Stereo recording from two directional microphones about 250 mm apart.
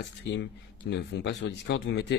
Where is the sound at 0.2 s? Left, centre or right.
Left.